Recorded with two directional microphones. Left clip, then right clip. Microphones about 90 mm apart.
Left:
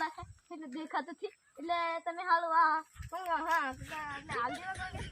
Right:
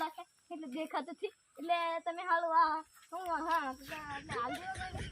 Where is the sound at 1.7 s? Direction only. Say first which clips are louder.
Even; 40° right (ahead or behind).